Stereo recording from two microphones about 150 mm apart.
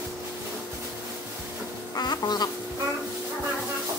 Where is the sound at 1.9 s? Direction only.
30° left (ahead or behind).